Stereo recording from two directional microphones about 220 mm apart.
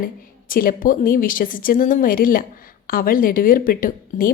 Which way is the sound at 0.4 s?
40° left (ahead or behind).